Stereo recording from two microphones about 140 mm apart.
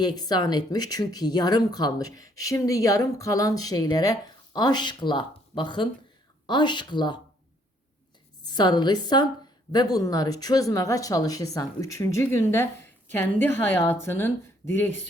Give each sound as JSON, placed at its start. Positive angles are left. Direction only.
{"t": 0.0, "sound": "a woman's voice", "side_deg": 30}
{"t": 8.4, "sound": "a woman's voice", "side_deg": 30}